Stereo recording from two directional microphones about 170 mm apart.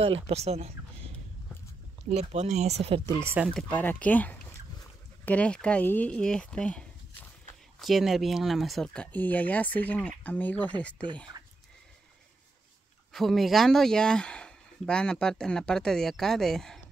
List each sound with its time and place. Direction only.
0.0 s speech: 35° right (ahead or behind)
2.0 s speech: 40° right (ahead or behind)
3.1 s speech: 15° right (ahead or behind)
3.4 s speech: 5° left (ahead or behind)
13.1 s speech: centre (ahead or behind)